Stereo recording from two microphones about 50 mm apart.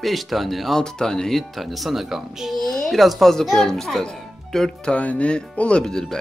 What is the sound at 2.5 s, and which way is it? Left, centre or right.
A woman's voice, centre.